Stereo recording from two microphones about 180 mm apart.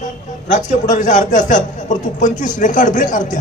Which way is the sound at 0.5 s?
40° left (ahead or behind).